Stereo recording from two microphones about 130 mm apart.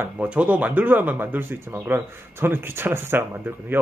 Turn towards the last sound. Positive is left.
turn(degrees=-15)  # may be behind; listen again after turning